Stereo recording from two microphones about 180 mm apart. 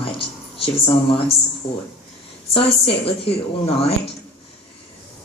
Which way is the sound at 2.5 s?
30° left (ahead or behind).